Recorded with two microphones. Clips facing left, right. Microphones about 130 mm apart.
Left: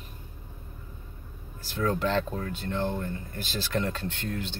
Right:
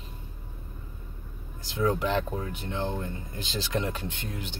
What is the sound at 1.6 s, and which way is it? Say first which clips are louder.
Speech: right 1 dB; 15° right (ahead or behind).